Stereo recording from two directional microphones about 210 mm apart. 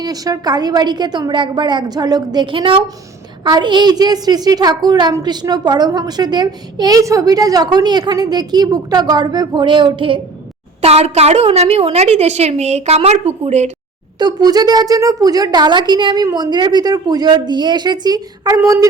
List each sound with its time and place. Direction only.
0.0 s a woman's voice: 20° right (ahead or behind)
14.2 s a woman's voice: 20° right (ahead or behind)